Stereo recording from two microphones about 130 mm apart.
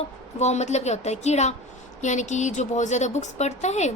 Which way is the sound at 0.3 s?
60° left (ahead or behind).